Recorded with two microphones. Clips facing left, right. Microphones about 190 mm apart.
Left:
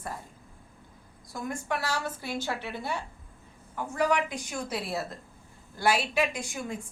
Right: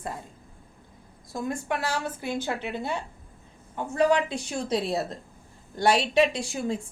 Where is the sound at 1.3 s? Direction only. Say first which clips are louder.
Right 3 dB; 25° right (ahead or behind).